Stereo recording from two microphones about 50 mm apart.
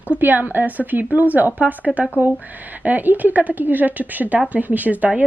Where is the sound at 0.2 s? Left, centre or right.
Right.